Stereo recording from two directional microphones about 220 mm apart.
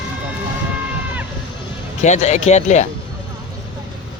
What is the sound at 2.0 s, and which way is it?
Speech, 30° left (ahead or behind).